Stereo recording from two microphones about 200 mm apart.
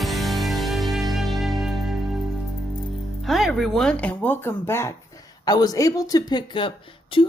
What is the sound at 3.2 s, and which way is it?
Speech, centre (ahead or behind).